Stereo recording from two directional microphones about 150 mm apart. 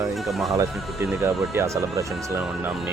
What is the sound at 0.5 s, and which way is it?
Speech, 20° right (ahead or behind).